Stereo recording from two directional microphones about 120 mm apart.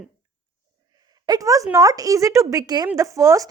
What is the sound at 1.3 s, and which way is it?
A woman's voice, 30° right (ahead or behind).